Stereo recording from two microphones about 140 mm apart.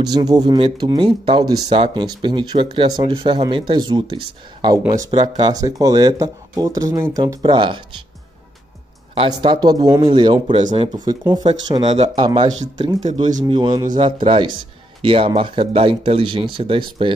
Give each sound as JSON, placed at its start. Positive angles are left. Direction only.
{"t": 0.0, "sound": "speech", "side_deg": -30}
{"t": 7.4, "sound": "speech", "side_deg": -35}
{"t": 9.1, "sound": "speech", "side_deg": -35}